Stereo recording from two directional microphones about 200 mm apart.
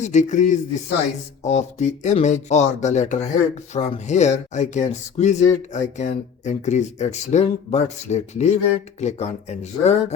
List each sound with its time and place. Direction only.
0.0 s speech: 35° left (ahead or behind)